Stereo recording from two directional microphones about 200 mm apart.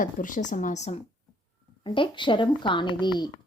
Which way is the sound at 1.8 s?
25° left (ahead or behind).